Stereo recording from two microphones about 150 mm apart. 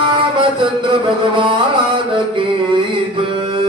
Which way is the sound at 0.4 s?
35° right (ahead or behind).